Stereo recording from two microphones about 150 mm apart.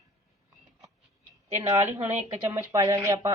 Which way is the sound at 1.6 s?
20° right (ahead or behind).